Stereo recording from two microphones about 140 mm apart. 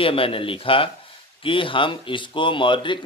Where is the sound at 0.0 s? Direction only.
40° left (ahead or behind).